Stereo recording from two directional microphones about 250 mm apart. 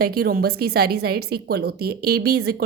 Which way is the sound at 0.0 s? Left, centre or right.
Right.